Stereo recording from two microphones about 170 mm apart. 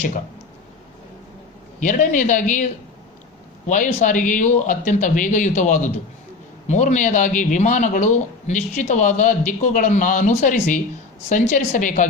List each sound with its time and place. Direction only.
1.8 s a man's voice: 50° left (ahead or behind)
3.7 s a man's voice: 50° left (ahead or behind)